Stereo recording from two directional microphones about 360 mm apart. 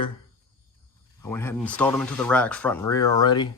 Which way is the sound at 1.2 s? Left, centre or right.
Centre.